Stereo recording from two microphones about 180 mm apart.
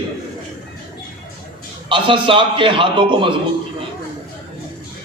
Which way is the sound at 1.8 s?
25° right (ahead or behind).